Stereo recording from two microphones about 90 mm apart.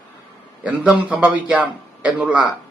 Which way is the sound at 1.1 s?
15° right (ahead or behind).